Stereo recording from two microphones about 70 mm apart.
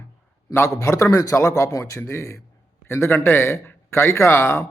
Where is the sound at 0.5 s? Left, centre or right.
Left.